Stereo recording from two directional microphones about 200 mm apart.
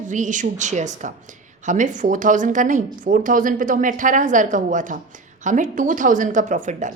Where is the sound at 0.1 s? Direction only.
40° right (ahead or behind).